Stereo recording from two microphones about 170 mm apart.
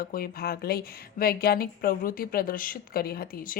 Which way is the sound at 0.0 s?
60° left (ahead or behind).